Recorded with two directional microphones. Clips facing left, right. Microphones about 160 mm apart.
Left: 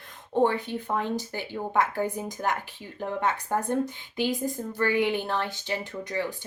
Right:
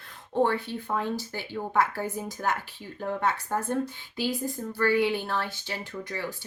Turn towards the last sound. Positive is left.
turn(degrees=15)  # may be behind; listen again after turning